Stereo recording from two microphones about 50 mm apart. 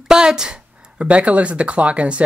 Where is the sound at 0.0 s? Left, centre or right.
Centre.